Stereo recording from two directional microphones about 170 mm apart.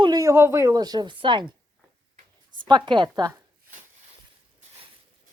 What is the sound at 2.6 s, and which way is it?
Speech, 25° right (ahead or behind).